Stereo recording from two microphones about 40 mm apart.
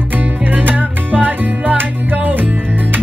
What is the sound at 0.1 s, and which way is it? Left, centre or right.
Music, right.